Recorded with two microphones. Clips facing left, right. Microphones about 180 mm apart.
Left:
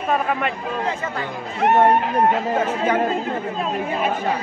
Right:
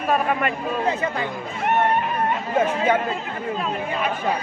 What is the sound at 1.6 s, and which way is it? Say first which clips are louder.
Speech: left 5 dB; 90° left.